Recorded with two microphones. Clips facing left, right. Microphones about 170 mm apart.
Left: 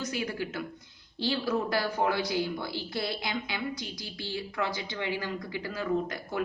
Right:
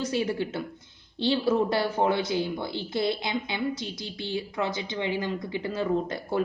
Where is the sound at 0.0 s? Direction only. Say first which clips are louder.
Right 6 dB; 25° right (ahead or behind).